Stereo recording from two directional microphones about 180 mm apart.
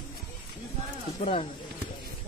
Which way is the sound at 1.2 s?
35° left (ahead or behind).